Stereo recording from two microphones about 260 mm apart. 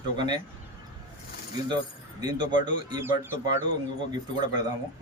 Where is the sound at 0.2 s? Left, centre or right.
Centre.